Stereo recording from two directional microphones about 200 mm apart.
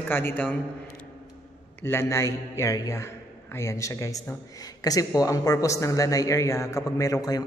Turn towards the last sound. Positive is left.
turn(degrees=20)  # may be behind; listen again after turning